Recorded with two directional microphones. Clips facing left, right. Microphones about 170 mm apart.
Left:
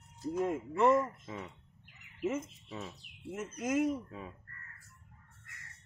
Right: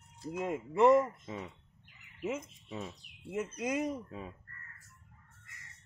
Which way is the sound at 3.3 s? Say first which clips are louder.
Even; 15° right (ahead or behind).